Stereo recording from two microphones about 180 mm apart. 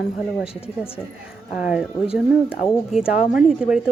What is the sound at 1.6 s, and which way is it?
A woman's voice, 5° right (ahead or behind).